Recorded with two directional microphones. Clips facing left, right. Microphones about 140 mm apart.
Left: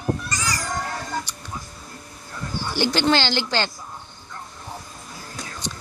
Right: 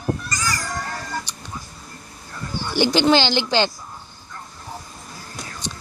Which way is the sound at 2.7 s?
15° right (ahead or behind).